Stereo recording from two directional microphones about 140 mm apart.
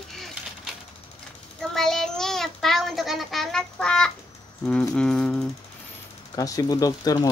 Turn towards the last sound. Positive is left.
turn(degrees=25)  # may be behind; listen again after turning